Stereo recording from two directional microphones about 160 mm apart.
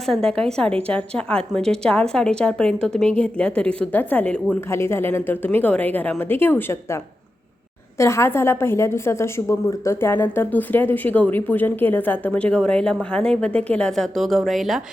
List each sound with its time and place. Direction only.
0.1 s a woman's voice: 5° left (ahead or behind)
7.9 s a woman's voice: 15° left (ahead or behind); by 14.8 s centre (ahead or behind)